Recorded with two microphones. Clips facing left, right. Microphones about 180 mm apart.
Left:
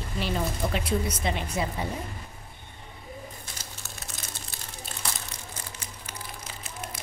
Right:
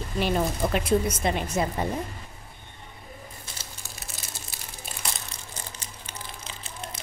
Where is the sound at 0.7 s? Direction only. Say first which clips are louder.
Right 5 dB; 50° right (ahead or behind).